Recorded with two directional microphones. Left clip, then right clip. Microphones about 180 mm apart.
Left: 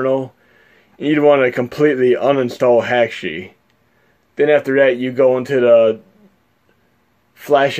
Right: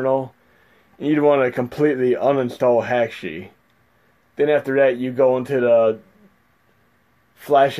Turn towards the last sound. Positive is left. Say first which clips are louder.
# left 2 dB
turn(degrees=10)  # may be behind; listen again after turning